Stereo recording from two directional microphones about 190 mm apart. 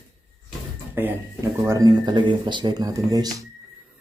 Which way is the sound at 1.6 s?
15° right (ahead or behind).